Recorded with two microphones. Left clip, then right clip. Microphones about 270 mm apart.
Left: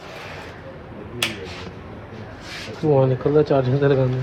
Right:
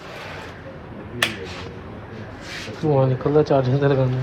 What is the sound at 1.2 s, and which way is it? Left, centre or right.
Finger snapping, centre.